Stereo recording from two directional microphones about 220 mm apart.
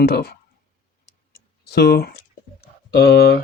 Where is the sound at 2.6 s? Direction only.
45° left (ahead or behind).